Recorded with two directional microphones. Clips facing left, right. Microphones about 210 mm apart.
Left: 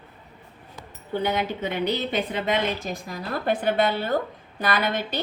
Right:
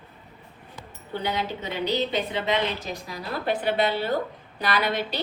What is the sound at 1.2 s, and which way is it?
A woman's voice, 55° left (ahead or behind).